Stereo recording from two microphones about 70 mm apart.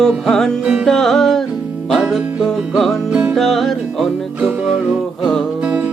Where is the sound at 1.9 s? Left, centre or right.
Centre.